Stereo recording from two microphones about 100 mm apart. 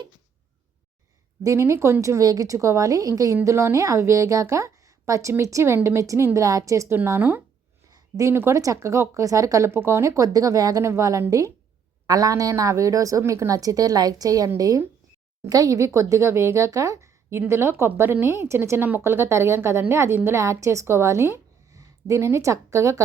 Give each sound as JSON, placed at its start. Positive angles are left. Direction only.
{"t": 1.5, "sound": "a woman's voice", "side_deg": -30}
{"t": 6.9, "sound": "a woman's voice", "side_deg": -20}
{"t": 7.9, "sound": "a woman's voice", "side_deg": -35}